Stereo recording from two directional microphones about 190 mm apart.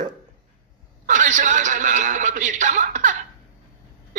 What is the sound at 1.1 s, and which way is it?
A man's voice, 40° right (ahead or behind).